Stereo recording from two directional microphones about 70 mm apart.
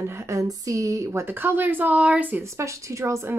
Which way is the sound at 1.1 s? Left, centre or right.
Right.